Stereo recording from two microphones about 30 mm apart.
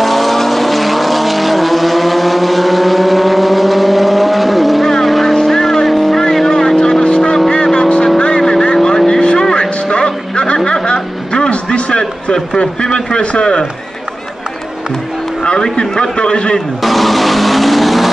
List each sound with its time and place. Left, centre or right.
0.0 s vehicle: centre
4.8 s vehicle: centre
6.3 s vehicle: centre
9.4 s music: left
12.5 s a sound: left
13.2 s run: left
15.4 s a sound: left
16.8 s vehicle: centre